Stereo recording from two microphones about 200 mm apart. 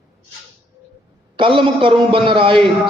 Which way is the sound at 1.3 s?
25° right (ahead or behind).